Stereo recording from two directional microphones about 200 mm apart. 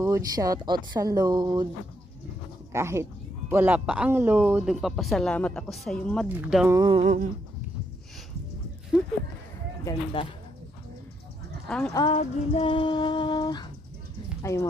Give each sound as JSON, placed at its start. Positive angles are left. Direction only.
{"t": 0.0, "sound": "speech", "side_deg": -15}
{"t": 2.7, "sound": "speech", "side_deg": -15}
{"t": 6.8, "sound": "a sound", "side_deg": -25}
{"t": 10.2, "sound": "music", "side_deg": 25}
{"t": 11.9, "sound": "music", "side_deg": 20}
{"t": 14.4, "sound": "speech", "side_deg": 15}